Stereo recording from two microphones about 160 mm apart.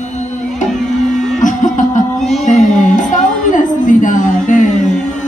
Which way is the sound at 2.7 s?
50° left (ahead or behind).